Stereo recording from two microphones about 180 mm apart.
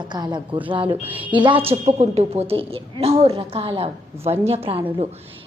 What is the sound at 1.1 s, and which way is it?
Speech, 10° right (ahead or behind).